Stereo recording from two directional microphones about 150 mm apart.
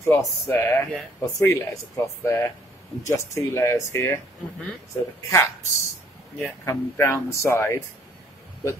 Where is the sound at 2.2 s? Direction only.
20° left (ahead or behind).